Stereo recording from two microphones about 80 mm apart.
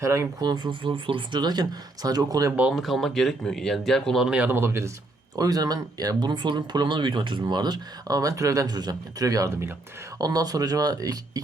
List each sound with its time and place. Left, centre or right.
0.0 s speech: right
0.3 s speech: right
2.7 s speech: centre
4.3 s speech: centre
4.5 s speech: right
5.4 s speech: right
8.1 s speech: right